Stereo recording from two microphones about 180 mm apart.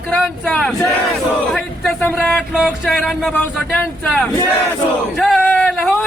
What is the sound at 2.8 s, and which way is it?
Music, centre (ahead or behind).